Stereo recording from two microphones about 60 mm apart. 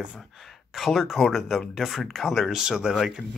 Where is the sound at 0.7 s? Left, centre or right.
Centre.